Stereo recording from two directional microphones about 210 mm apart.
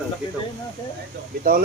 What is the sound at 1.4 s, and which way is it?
Speech, 40° right (ahead or behind).